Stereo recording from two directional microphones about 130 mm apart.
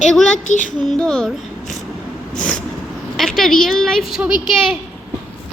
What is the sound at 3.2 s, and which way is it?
A woman's voice, centre (ahead or behind).